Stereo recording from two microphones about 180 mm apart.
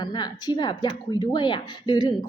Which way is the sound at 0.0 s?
25° left (ahead or behind).